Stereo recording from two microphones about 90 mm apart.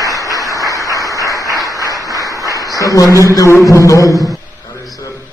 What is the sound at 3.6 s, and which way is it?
Speech, 35° left (ahead or behind).